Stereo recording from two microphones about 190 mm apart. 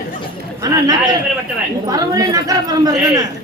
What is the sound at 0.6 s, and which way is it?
Speech, 20° right (ahead or behind).